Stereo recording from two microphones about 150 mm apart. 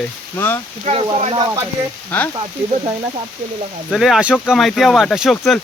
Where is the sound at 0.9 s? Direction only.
45° right (ahead or behind).